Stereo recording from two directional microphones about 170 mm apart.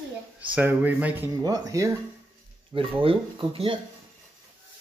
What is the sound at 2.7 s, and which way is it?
Speech, 30° right (ahead or behind).